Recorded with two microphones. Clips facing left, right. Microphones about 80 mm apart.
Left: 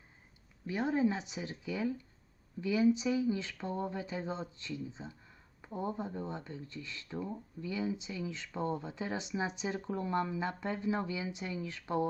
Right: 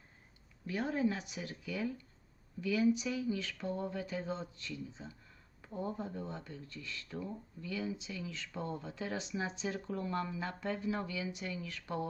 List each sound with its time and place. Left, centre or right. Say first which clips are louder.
0.7 s speech: left 3 dB; centre